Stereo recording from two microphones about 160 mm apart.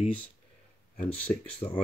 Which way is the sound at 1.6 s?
25° left (ahead or behind).